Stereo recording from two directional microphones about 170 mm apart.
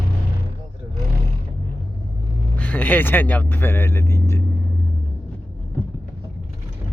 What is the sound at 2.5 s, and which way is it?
Speech, 10° left (ahead or behind).